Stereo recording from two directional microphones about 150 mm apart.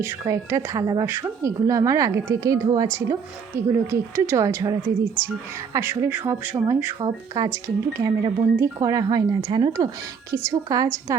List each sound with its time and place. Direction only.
0.0 s a woman's voice: 20° right (ahead or behind)
7.0 s a woman's voice: 25° right (ahead or behind)